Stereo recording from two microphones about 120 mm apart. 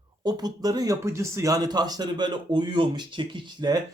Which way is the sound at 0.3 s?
35° right (ahead or behind).